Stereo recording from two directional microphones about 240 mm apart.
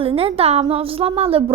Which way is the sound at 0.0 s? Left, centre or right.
Right.